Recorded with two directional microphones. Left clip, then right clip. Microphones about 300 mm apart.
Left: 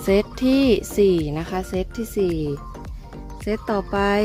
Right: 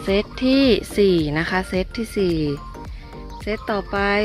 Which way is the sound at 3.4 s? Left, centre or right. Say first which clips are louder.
Even; centre.